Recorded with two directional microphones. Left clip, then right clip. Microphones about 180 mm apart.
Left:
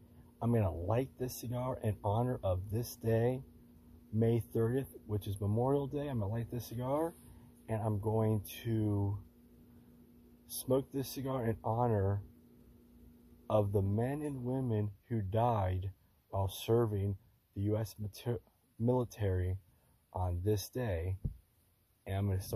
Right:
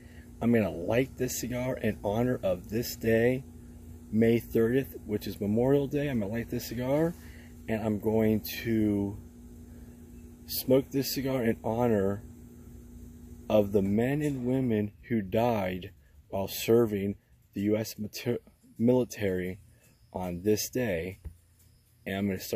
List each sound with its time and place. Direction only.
0.4 s speech: 15° right (ahead or behind)
10.4 s speech: 15° right (ahead or behind)
13.5 s speech: 15° right (ahead or behind)